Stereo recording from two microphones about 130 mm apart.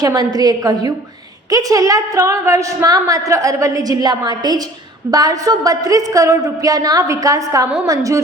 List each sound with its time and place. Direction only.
0.0 s a woman's voice: 30° right (ahead or behind)